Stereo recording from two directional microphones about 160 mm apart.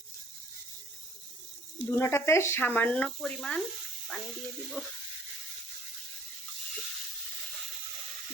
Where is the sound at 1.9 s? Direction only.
15° left (ahead or behind).